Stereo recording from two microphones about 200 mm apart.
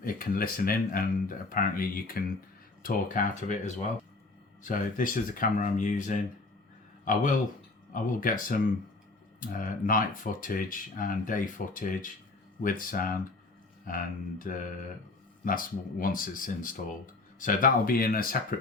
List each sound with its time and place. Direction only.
0.0 s speech: 45° left (ahead or behind)